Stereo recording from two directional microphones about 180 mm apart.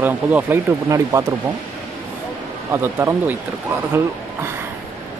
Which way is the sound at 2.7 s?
10° right (ahead or behind).